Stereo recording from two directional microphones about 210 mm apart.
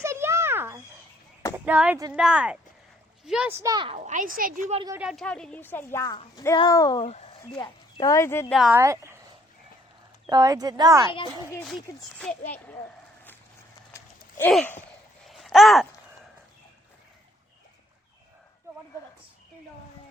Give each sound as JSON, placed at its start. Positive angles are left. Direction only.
{"t": 0.0, "sound": "a sound", "side_deg": -15}
{"t": 1.5, "sound": "speech", "side_deg": -5}
{"t": 3.6, "sound": "a woman's voice", "side_deg": -20}
{"t": 3.9, "sound": "a child's voice", "side_deg": -35}
{"t": 4.7, "sound": "a woman's voice", "side_deg": -20}
{"t": 4.9, "sound": "speech", "side_deg": 0}
{"t": 8.5, "sound": "speech", "side_deg": 0}
{"t": 8.8, "sound": "speech", "side_deg": -15}
{"t": 10.2, "sound": "speech", "side_deg": -15}
{"t": 13.9, "sound": "a sound", "side_deg": 10}
{"t": 14.5, "sound": "speech", "side_deg": 5}
{"t": 15.2, "sound": "a sound", "side_deg": 0}